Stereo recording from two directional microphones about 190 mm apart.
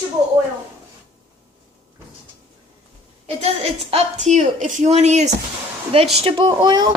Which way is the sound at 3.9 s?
35° right (ahead or behind).